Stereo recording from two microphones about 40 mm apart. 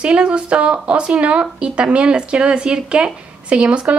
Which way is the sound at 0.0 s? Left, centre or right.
Right.